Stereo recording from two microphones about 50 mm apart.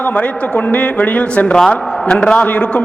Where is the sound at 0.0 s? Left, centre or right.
Left.